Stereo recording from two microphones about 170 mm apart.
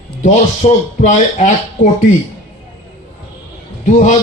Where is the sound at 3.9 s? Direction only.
45° left (ahead or behind).